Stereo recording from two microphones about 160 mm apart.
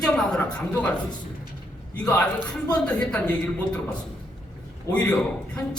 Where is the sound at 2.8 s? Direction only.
5° left (ahead or behind).